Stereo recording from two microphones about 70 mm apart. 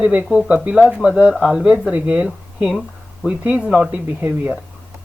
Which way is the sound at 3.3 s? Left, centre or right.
Centre.